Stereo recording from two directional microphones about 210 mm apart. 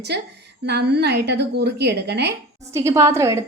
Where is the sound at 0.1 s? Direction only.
55° right (ahead or behind).